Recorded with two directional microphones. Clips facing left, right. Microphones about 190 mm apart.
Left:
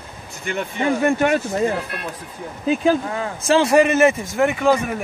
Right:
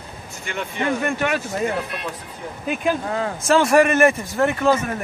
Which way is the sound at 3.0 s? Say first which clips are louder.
Right 2 dB; 25° right (ahead or behind).